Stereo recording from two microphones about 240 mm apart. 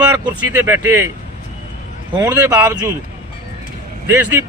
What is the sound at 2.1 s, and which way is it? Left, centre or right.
Speech, centre.